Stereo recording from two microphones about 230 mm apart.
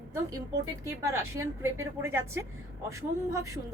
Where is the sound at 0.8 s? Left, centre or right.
Centre.